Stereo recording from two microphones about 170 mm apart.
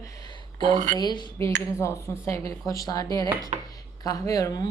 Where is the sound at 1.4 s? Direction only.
15° left (ahead or behind).